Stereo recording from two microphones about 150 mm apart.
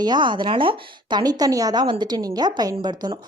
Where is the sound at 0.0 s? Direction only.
30° right (ahead or behind).